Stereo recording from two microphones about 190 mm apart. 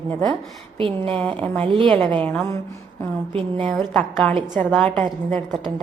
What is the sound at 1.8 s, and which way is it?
Speech, 5° left (ahead or behind).